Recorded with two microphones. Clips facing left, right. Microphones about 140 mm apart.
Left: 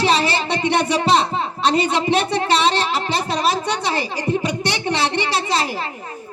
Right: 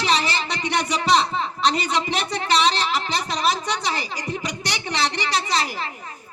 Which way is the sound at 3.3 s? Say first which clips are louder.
Left 2 dB; 30° left (ahead or behind).